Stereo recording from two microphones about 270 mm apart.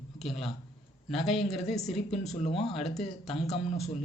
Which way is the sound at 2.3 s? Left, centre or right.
Left.